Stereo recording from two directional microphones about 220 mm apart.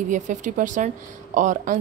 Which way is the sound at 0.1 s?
35° right (ahead or behind).